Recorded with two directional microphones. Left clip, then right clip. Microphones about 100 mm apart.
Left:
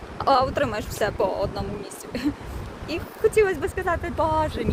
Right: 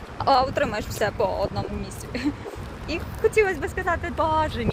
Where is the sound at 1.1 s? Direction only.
65° left (ahead or behind).